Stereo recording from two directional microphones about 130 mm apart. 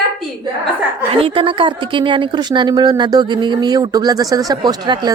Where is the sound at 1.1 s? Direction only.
45° right (ahead or behind).